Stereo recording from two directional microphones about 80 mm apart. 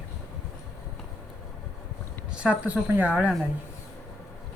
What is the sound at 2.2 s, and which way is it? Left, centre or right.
Speech, centre.